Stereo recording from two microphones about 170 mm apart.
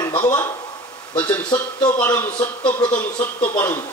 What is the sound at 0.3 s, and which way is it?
Speech, 20° left (ahead or behind).